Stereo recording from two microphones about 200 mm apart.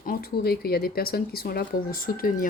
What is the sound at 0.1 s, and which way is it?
Speech, 50° left (ahead or behind).